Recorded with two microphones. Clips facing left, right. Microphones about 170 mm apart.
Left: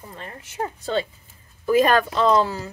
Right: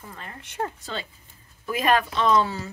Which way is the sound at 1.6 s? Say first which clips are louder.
Left 5 dB; 35° left (ahead or behind).